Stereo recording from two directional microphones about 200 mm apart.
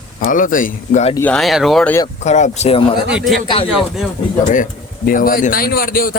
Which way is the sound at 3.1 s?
Centre (ahead or behind).